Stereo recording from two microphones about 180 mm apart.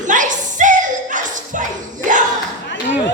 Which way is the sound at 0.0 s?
45° right (ahead or behind).